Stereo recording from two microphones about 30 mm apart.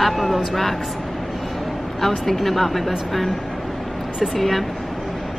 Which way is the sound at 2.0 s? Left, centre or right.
Centre.